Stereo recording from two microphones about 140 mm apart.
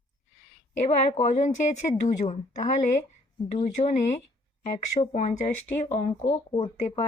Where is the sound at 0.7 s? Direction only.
55° left (ahead or behind).